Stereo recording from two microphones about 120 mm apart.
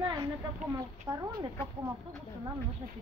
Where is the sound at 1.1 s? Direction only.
35° right (ahead or behind).